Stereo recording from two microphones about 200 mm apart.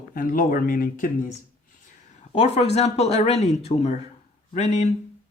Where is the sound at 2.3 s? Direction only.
35° left (ahead or behind).